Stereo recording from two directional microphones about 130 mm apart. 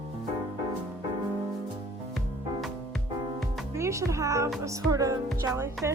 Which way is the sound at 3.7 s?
20° right (ahead or behind).